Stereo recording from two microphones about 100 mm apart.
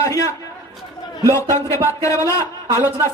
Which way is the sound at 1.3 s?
30° left (ahead or behind).